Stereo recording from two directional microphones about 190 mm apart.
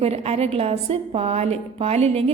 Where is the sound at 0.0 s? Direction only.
35° right (ahead or behind).